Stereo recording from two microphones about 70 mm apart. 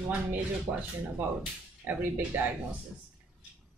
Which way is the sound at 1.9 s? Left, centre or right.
Right.